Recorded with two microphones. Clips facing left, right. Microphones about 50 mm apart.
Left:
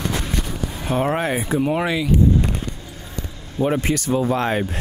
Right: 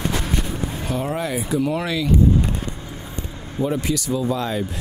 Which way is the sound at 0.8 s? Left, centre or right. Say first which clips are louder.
Left 5 dB; left.